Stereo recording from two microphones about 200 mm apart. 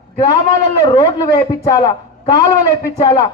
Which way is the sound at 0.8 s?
20° left (ahead or behind).